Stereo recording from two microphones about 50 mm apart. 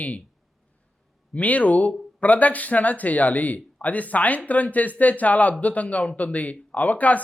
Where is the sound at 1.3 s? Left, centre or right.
Left.